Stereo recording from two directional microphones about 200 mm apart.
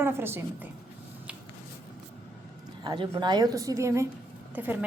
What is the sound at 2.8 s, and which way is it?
A woman's voice, 20° right (ahead or behind).